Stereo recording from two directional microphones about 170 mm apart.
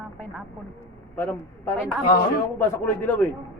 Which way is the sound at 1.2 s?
15° left (ahead or behind).